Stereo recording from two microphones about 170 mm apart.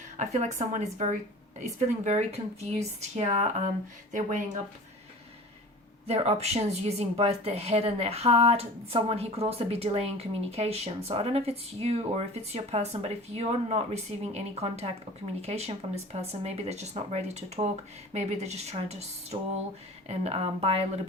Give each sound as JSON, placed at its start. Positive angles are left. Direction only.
{"t": 0.2, "sound": "a woman's voice", "side_deg": -45}
{"t": 2.0, "sound": "a woman's voice", "side_deg": -40}
{"t": 6.1, "sound": "a woman's voice", "side_deg": -40}